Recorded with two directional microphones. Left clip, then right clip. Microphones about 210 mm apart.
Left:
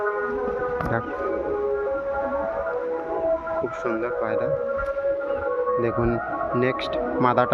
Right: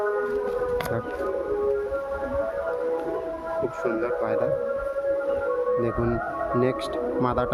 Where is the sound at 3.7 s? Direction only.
10° right (ahead or behind).